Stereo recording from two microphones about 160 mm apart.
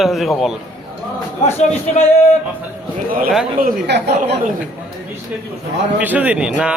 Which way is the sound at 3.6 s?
90° right.